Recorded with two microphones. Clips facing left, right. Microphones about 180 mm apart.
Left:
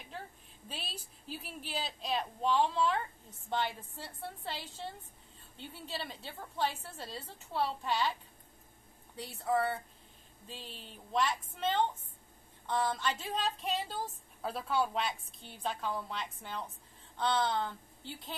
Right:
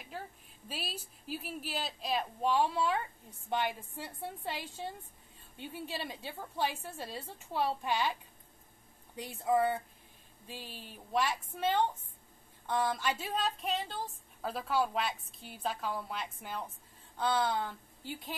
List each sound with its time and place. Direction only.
0.7 s a woman's voice: 5° right (ahead or behind)